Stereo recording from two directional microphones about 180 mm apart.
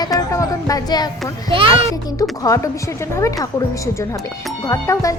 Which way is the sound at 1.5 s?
30° right (ahead or behind).